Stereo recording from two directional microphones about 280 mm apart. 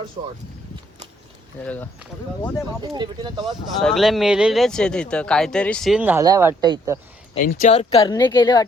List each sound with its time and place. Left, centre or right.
1.6 s speech: centre
2.9 s speech: centre
3.8 s speech: centre
7.4 s speech: left